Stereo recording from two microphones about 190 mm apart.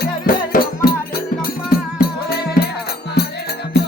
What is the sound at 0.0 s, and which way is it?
Music, 50° left (ahead or behind).